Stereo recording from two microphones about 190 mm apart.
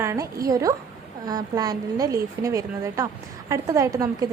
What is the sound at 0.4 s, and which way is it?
A woman's voice, 20° right (ahead or behind).